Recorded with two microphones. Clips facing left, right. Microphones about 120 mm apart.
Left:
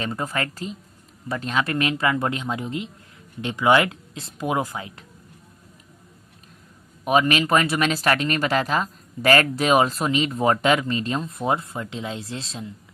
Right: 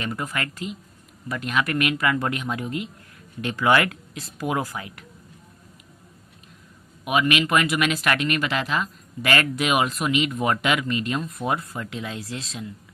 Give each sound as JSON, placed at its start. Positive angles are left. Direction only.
{"t": 0.0, "sound": "speech", "side_deg": 30}
{"t": 7.0, "sound": "speech", "side_deg": 35}